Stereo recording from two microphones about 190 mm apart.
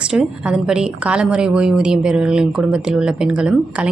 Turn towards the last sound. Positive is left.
turn(degrees=-5)  # may be behind; listen again after turning